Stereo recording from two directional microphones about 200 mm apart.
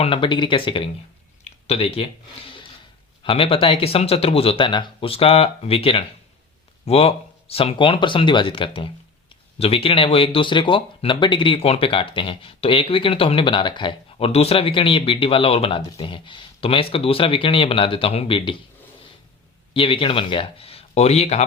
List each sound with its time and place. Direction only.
0.0 s speech: 25° left (ahead or behind)
1.5 s a sound: 30° left (ahead or behind)
3.2 s speech: 25° left (ahead or behind)
19.7 s speech: 25° left (ahead or behind)